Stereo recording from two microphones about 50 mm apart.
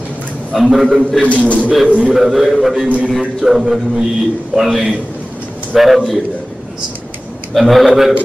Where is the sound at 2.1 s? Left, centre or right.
Centre.